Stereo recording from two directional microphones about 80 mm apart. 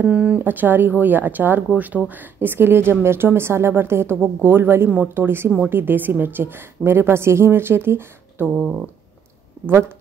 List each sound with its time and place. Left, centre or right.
0.0 s speech: centre
8.5 s speech: centre